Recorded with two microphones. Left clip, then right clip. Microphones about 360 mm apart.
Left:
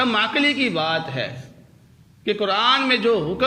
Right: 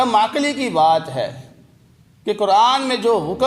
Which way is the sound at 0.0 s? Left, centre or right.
Centre.